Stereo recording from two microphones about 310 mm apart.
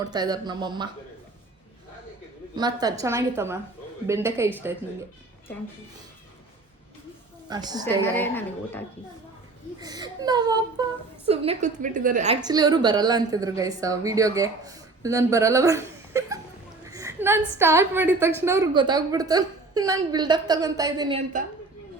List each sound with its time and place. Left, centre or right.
0.0 s a woman's voice: centre
2.6 s a woman's voice: centre
7.5 s a woman's voice: centre
8.0 s a woman's voice: centre
9.8 s a woman's voice: centre
12.5 s a woman's voice: centre